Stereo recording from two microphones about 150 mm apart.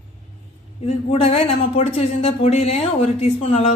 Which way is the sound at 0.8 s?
40° left (ahead or behind).